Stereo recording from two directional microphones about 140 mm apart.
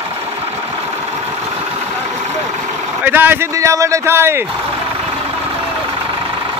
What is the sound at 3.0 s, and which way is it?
A man's voice, 15° right (ahead or behind).